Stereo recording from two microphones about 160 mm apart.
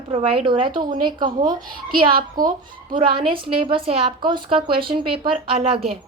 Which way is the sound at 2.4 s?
60° right (ahead or behind).